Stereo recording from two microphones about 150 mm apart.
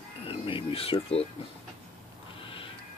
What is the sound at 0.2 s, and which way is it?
Speech, 35° left (ahead or behind).